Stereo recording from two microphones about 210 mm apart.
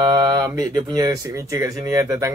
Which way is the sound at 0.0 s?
20° right (ahead or behind).